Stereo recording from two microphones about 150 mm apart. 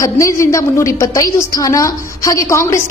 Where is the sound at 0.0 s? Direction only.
20° left (ahead or behind).